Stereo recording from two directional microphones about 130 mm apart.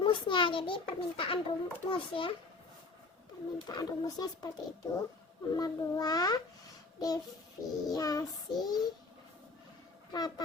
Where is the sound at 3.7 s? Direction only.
30° left (ahead or behind).